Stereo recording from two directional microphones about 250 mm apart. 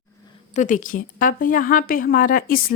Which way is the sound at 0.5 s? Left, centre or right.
Left.